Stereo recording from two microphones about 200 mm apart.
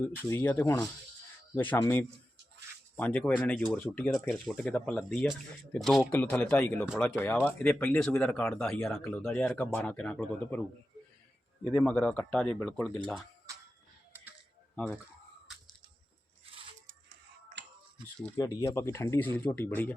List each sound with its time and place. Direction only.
0.2 s speech: 10° left (ahead or behind)
11.6 s speech: 5° left (ahead or behind)
17.6 s finger snapping: 60° right (ahead or behind)
18.2 s speech: 5° left (ahead or behind)